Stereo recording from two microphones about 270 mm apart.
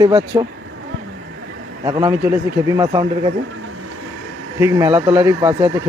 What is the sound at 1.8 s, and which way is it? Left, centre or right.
Speech, centre.